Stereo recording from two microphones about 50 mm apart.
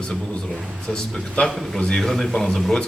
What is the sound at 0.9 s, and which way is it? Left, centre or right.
Speech, centre.